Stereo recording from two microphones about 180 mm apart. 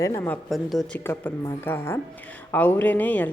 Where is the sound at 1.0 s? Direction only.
15° left (ahead or behind).